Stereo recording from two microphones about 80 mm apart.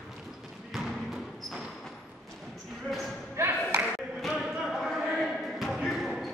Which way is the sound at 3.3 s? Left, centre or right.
Right.